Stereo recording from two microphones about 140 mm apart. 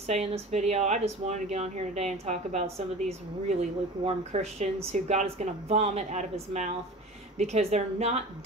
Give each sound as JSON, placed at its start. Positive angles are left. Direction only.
{"t": 0.0, "sound": "a woman's voice", "side_deg": -50}